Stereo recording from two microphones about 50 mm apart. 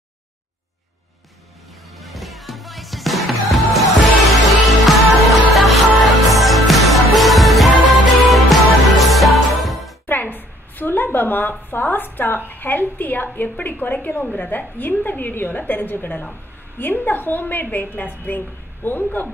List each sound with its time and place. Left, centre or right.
2.0 s music: centre
10.0 s a sound: left
11.7 s a woman's voice: left